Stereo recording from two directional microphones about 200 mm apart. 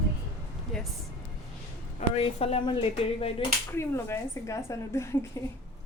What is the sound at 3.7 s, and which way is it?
Speech, 10° left (ahead or behind).